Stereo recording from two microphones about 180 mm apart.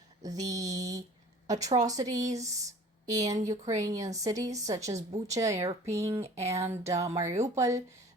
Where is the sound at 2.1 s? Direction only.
40° right (ahead or behind).